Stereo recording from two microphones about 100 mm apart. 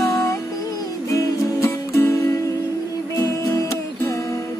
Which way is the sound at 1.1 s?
30° left (ahead or behind).